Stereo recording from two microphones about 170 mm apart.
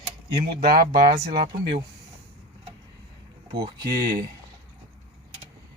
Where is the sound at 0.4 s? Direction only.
65° right (ahead or behind).